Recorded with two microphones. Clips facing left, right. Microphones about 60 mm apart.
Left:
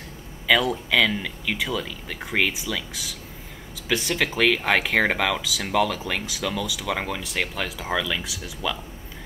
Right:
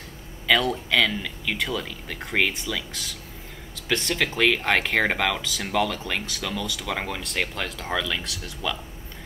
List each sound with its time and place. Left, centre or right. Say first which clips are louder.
0.5 s speech: left 1 dB; centre